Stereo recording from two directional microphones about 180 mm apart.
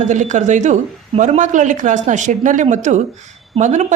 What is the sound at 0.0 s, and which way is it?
A woman's voice, 40° right (ahead or behind).